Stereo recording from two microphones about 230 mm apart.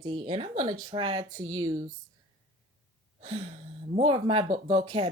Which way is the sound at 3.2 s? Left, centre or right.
Right.